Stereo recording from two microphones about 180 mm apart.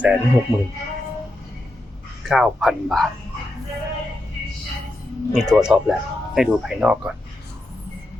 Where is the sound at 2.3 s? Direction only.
Centre (ahead or behind).